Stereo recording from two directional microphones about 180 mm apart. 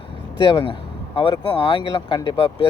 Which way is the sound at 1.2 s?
30° left (ahead or behind).